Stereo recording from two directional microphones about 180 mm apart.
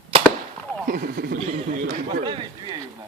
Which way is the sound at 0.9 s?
55° right (ahead or behind).